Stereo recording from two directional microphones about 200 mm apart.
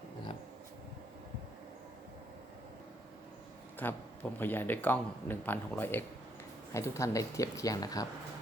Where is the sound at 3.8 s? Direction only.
10° left (ahead or behind).